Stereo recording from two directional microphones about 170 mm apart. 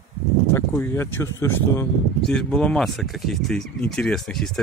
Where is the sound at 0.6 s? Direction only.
15° left (ahead or behind).